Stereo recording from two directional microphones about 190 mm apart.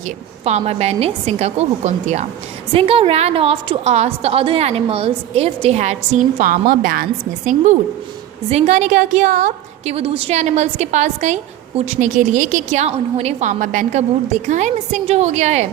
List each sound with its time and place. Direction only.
0.4 s a woman's voice: 35° right (ahead or behind)